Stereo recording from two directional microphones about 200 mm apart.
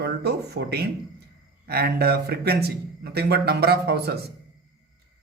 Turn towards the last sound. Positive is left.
turn(degrees=-55)  # may be behind; listen again after turning